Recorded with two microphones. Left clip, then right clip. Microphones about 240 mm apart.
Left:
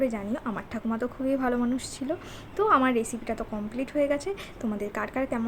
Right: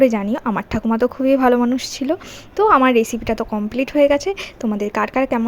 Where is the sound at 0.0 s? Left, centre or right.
Right.